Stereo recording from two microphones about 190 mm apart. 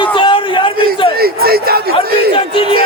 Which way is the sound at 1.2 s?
55° right (ahead or behind).